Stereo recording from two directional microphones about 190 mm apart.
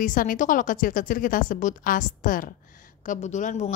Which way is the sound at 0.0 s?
45° left (ahead or behind).